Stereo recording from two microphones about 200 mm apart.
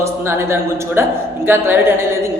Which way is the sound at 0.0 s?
15° right (ahead or behind).